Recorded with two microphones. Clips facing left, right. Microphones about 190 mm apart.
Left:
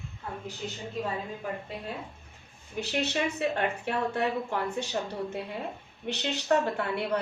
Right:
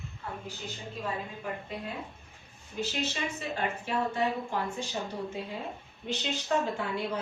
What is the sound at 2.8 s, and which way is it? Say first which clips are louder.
A woman's voice: left 4 dB; 65° left (ahead or behind).